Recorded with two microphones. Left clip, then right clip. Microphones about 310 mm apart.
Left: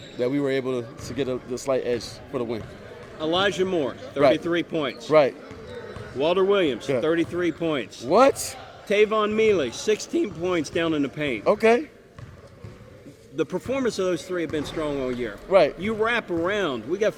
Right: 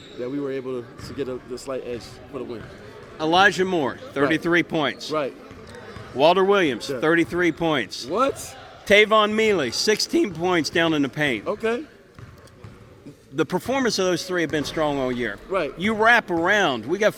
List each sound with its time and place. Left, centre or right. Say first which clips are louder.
0.2 s speech: left 4 dB; left
3.2 s speech: right 5 dB; right
6.1 s speech: right 4 dB; right
8.0 s speech: left 9 dB; left
8.9 s a man's voice: right 5 dB; right
11.4 s speech: left 6 dB; left
13.3 s speech: right 3 dB; right
15.4 s speech: left 9 dB; left
15.8 s speech: right 7 dB; right